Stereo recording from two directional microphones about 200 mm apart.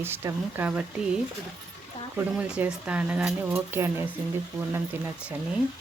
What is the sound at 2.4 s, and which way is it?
Speech, 5° right (ahead or behind).